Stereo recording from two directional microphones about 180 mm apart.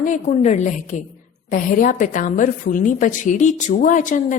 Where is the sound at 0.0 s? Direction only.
45° left (ahead or behind).